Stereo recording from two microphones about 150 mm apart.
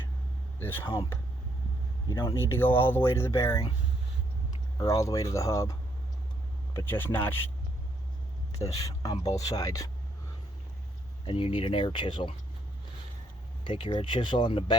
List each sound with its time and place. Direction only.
0.6 s speech: 15° left (ahead or behind)
2.4 s speech: 15° left (ahead or behind)
4.8 s speech: 20° left (ahead or behind)
6.7 s speech: 15° left (ahead or behind)
8.5 s speech: 20° left (ahead or behind)
9.1 s speech: 45° left (ahead or behind)
9.4 s speech: 25° left (ahead or behind)
11.3 s speech: 40° left (ahead or behind)
13.7 s speech: 35° left (ahead or behind)